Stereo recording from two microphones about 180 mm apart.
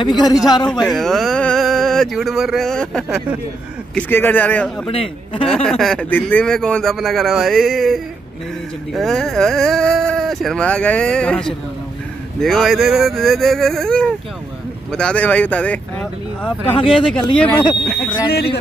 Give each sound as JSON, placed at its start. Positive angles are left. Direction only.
{"t": 0.0, "sound": "a man's voice", "side_deg": 25}
{"t": 0.7, "sound": "speech", "side_deg": 0}
{"t": 4.8, "sound": "speech", "side_deg": 30}
{"t": 5.4, "sound": "speech", "side_deg": 5}